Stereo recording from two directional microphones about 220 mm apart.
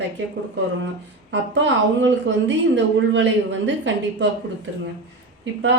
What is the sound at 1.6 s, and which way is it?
A woman's voice, 55° right (ahead or behind).